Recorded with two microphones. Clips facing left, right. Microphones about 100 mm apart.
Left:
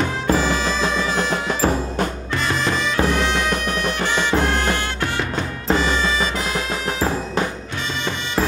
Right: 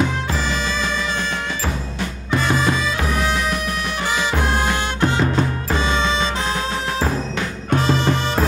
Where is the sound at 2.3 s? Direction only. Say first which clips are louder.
Right 3 dB; 5° right (ahead or behind); by 6.1 s 25° right (ahead or behind).